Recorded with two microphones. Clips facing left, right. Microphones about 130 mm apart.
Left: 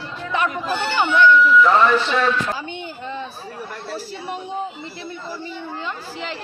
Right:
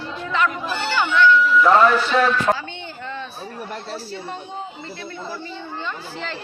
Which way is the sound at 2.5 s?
50° right (ahead or behind).